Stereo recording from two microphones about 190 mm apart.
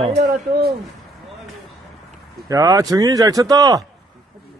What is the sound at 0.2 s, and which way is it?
Speech, 55° right (ahead or behind).